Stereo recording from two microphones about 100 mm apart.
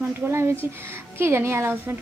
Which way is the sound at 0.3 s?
25° right (ahead or behind).